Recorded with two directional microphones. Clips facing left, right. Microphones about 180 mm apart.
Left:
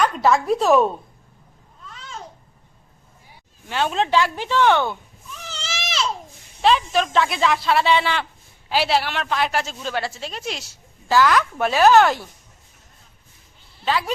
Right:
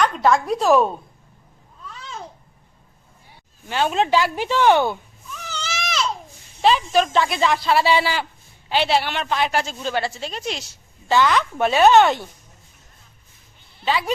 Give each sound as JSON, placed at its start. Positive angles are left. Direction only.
{"t": 0.0, "sound": "speech", "side_deg": 5}
{"t": 3.7, "sound": "speech", "side_deg": 0}
{"t": 5.5, "sound": "baby cry", "side_deg": 30}
{"t": 5.8, "sound": "a sound", "side_deg": 0}
{"t": 6.6, "sound": "a woman's voice", "side_deg": 0}